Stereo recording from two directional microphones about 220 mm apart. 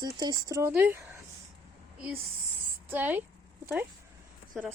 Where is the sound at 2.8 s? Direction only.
10° right (ahead or behind).